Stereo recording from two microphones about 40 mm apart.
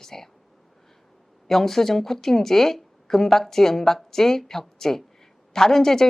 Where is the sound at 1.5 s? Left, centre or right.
Centre.